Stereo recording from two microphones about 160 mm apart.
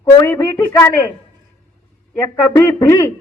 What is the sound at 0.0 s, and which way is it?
Speech, 15° left (ahead or behind).